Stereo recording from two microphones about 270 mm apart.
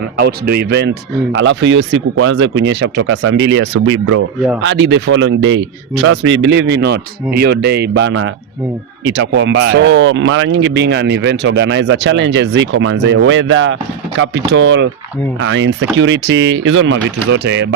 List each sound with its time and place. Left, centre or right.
0.2 s speech: right